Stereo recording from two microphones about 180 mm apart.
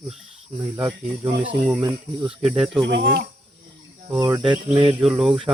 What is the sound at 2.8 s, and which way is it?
Speech, 90° right.